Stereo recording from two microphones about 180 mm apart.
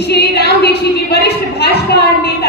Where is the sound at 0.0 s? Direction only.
65° left (ahead or behind).